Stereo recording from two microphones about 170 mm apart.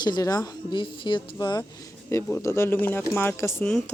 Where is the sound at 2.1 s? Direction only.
15° left (ahead or behind).